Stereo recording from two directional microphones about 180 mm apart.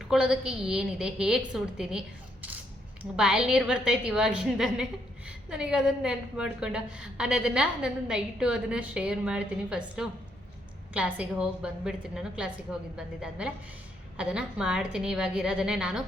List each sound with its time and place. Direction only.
0.1 s a woman's voice: 5° right (ahead or behind)